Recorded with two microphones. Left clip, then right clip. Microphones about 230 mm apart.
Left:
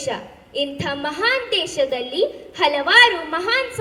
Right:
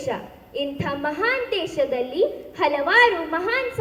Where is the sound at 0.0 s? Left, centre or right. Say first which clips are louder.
Left 2 dB; left.